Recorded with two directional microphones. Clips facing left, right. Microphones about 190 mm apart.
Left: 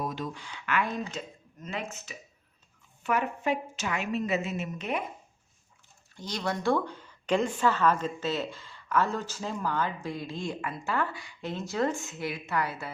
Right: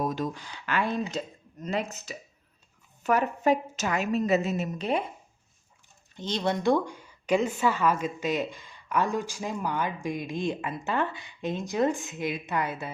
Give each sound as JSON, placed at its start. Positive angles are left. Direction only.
{"t": 0.0, "sound": "a woman's voice", "side_deg": -45}
{"t": 6.1, "sound": "a woman's voice", "side_deg": -25}